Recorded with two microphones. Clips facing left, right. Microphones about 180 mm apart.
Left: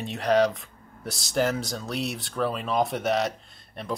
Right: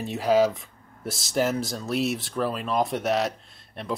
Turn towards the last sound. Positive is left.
turn(degrees=0)  # may be behind; listen again after turning